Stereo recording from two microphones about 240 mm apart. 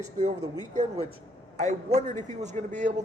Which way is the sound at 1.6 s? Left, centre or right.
Right.